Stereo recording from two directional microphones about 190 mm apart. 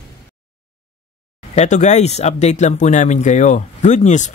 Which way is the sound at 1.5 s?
35° left (ahead or behind).